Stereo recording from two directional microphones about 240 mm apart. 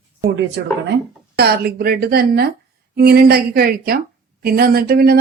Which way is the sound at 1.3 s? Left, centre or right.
Right.